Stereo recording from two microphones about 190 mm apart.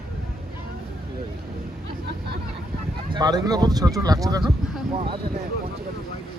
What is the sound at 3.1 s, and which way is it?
Speech, 20° right (ahead or behind).